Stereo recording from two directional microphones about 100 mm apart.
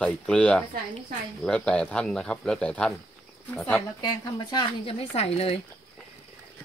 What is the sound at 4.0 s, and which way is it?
Speech, 40° left (ahead or behind).